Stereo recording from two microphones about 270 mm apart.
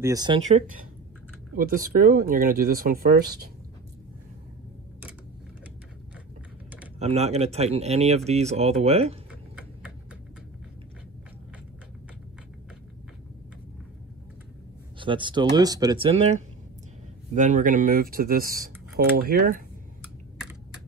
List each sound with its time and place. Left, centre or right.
0.0 s speech: centre
1.5 s speech: right
7.0 s speech: right
15.0 s speech: centre